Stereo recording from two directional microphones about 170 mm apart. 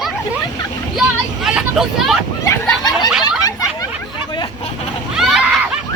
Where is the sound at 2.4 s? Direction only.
15° left (ahead or behind).